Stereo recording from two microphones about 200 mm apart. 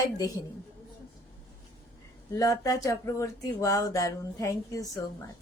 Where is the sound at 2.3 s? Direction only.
15° left (ahead or behind).